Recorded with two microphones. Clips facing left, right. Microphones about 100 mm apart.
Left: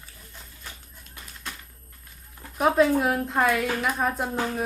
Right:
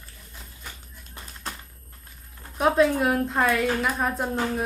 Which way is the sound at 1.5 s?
30° right (ahead or behind).